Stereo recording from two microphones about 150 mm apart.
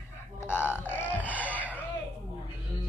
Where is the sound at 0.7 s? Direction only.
15° left (ahead or behind).